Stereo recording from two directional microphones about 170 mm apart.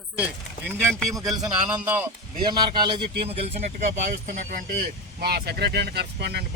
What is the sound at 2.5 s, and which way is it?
Speech, 25° right (ahead or behind).